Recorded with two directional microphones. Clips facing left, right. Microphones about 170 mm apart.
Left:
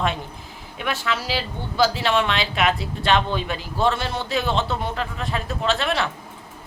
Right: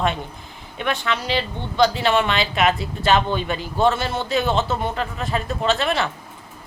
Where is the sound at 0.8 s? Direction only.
5° left (ahead or behind).